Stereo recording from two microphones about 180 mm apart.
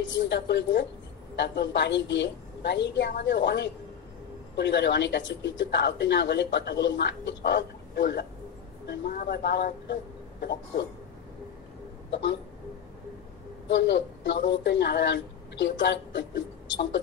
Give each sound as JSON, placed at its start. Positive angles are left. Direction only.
{"t": 0.0, "sound": "a woman's voice", "side_deg": 80}
{"t": 9.1, "sound": "speech", "side_deg": 55}
{"t": 12.1, "sound": "speech", "side_deg": 75}
{"t": 13.7, "sound": "a woman's voice", "side_deg": 75}